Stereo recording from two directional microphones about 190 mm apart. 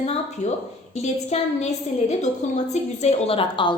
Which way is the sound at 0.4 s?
40° left (ahead or behind).